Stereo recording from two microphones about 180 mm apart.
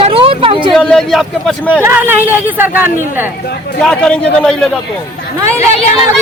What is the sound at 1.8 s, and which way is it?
Speech, 10° right (ahead or behind).